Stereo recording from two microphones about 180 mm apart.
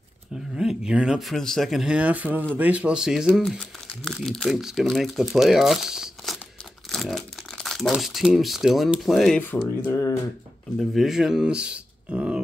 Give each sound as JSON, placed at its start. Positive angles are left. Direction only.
{"t": 0.6, "sound": "speech", "side_deg": -5}
{"t": 9.8, "sound": "speech", "side_deg": 20}
{"t": 11.0, "sound": "speech", "side_deg": 0}